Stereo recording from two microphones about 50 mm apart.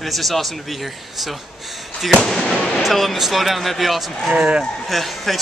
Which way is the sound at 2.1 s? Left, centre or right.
Centre.